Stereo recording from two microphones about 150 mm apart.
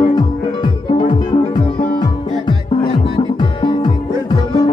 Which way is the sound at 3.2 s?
30° left (ahead or behind).